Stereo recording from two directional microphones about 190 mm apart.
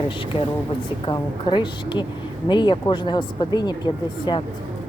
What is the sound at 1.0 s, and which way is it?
Speech, 25° left (ahead or behind).